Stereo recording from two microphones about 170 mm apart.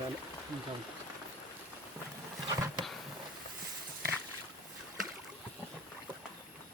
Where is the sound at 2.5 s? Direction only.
25° right (ahead or behind).